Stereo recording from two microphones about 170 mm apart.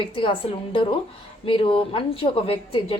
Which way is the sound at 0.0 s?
30° left (ahead or behind).